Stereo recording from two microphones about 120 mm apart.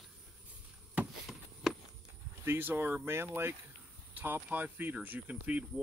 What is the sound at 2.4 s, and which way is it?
Speech, 20° right (ahead or behind).